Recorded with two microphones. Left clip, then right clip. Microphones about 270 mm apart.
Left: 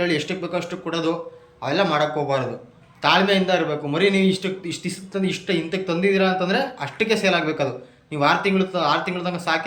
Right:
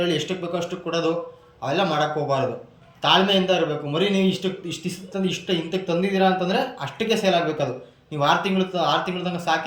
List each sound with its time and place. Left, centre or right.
0.0 s speech: centre